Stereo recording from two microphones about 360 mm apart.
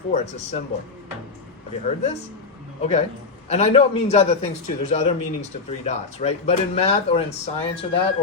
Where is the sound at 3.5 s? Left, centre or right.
Centre.